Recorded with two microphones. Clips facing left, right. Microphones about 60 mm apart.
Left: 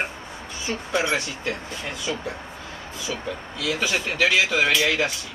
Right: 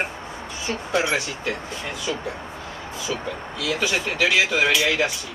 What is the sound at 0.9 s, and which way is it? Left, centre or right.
Speech, centre.